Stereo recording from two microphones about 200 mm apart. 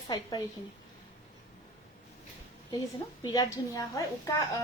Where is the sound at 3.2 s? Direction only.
20° left (ahead or behind).